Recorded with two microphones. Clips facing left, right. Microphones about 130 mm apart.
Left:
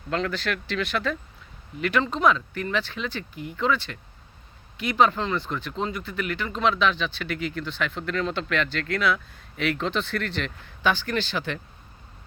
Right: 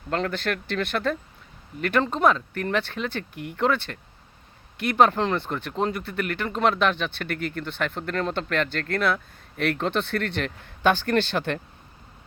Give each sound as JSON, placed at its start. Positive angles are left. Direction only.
{"t": 0.1, "sound": "speech", "side_deg": -50}